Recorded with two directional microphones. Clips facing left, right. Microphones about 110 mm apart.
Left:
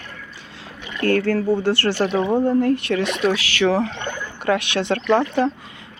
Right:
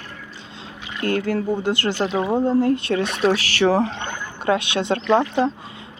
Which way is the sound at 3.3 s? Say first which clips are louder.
Right 1 dB; 40° right (ahead or behind).